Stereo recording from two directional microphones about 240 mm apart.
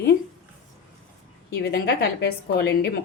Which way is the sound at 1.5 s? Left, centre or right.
Left.